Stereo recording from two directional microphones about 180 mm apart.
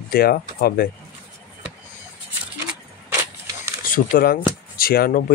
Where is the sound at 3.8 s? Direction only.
50° left (ahead or behind).